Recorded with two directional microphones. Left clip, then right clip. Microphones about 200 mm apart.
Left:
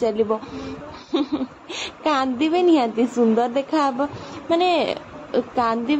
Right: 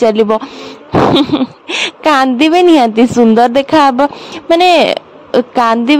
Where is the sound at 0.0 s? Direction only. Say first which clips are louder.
Right 11 dB; 45° right (ahead or behind).